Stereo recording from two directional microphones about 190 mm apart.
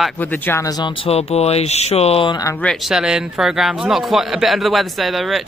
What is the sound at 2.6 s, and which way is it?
A man's voice, centre (ahead or behind).